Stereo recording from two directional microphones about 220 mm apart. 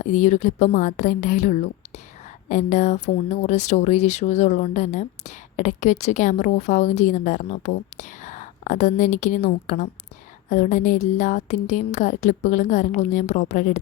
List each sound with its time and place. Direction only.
0.0 s speech: 35° left (ahead or behind)